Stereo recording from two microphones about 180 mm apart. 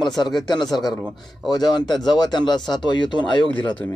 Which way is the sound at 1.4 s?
25° left (ahead or behind).